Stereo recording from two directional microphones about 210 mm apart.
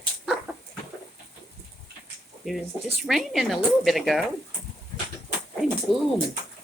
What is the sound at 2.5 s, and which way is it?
A woman's voice, centre (ahead or behind).